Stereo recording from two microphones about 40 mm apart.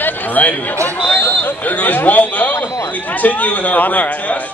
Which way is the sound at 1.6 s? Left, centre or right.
Left.